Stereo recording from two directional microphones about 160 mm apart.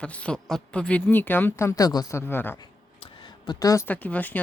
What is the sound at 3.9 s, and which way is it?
Speech, 10° left (ahead or behind).